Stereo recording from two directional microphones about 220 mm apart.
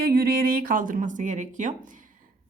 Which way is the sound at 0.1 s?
40° right (ahead or behind).